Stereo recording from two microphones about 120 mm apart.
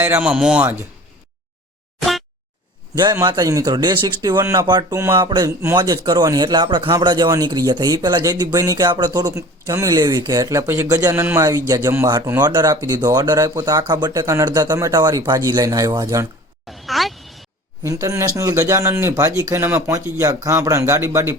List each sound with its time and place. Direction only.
0.0 s speech: 10° right (ahead or behind)
2.0 s boing: centre (ahead or behind)
2.9 s a man's voice: 35° right (ahead or behind)
4.6 s speech: 40° right (ahead or behind)
4.9 s speech: 20° right (ahead or behind)
5.2 s speech: 35° right (ahead or behind)
16.6 s a sound: centre (ahead or behind)
17.8 s speech: 25° right (ahead or behind)